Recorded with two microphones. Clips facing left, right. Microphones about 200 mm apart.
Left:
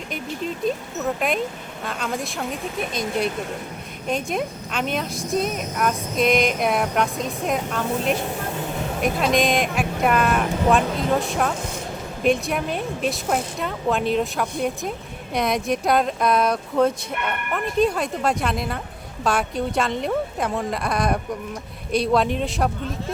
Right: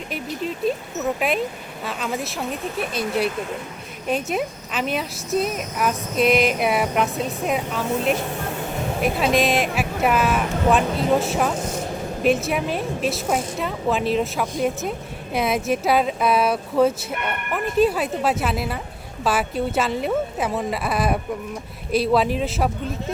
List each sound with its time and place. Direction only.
1.8 s a woman's voice: 5° right (ahead or behind)